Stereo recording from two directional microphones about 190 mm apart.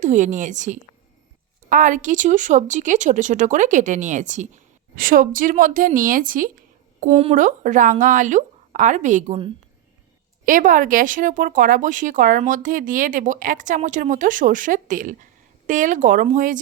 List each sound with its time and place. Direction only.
0.0 s speech: 40° right (ahead or behind)
7.1 s speech: 30° right (ahead or behind)
7.3 s speech: 40° right (ahead or behind)
10.4 s speech: 45° right (ahead or behind)